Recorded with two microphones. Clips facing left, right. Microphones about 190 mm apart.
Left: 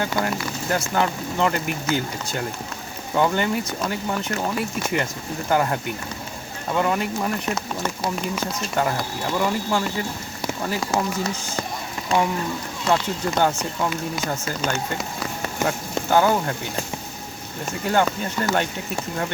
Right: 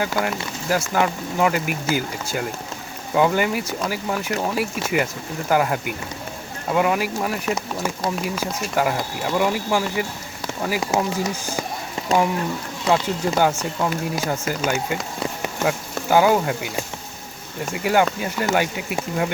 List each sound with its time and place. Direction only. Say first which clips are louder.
0.0 s speech: right 1 dB; 5° right (ahead or behind)
12.9 s speech: right 2 dB; 10° right (ahead or behind)
17.7 s speech: right 2 dB; 10° right (ahead or behind)